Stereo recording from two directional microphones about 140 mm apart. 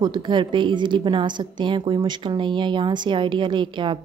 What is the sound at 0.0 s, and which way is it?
A woman's voice, 35° right (ahead or behind).